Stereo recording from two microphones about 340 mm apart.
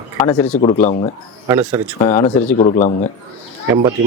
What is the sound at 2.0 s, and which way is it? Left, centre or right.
Speech, centre.